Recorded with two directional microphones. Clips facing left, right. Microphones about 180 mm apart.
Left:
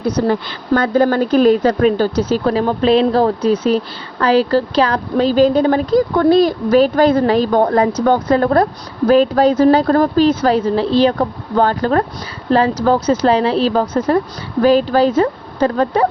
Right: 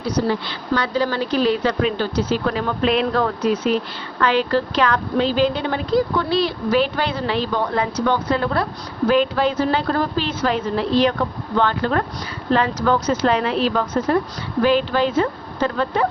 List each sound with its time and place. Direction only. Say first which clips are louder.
0.0 s a woman's voice: left 5 dB; 50° left (ahead or behind)